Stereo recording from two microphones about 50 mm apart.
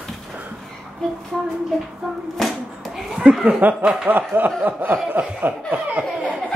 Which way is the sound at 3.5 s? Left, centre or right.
Right.